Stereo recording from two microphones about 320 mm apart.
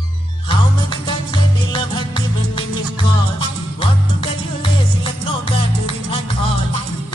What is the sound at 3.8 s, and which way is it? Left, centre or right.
Music, centre.